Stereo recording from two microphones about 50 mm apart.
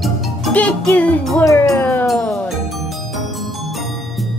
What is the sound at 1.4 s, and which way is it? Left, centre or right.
Music, left.